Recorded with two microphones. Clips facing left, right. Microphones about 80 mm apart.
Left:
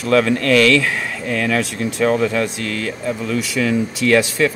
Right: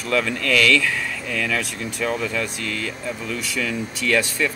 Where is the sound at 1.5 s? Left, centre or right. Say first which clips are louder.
Left 7 dB; left.